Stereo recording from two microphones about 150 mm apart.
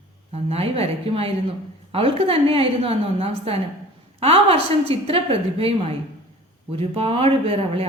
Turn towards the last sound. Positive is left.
turn(degrees=-40)  # may be behind; listen again after turning